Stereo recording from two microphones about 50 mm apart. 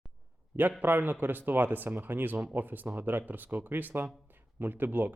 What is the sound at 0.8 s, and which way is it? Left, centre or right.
Speech, right.